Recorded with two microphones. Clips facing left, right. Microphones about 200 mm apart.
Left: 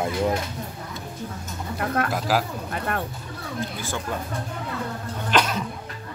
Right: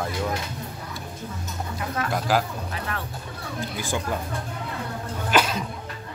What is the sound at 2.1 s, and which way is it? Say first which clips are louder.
Speech: even; 5° left (ahead or behind).